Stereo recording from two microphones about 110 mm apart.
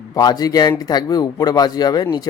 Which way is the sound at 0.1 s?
35° left (ahead or behind).